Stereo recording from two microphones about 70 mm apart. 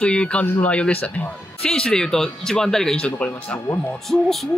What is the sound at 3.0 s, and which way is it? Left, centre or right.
Speech, centre.